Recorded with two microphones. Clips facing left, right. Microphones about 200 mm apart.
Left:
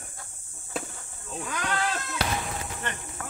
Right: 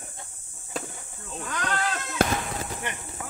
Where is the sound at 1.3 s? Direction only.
5° left (ahead or behind).